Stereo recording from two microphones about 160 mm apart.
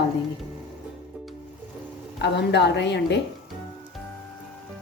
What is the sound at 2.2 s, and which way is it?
Speech, 90° left.